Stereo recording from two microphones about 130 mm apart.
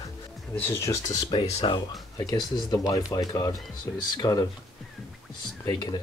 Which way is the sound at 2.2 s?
30° left (ahead or behind).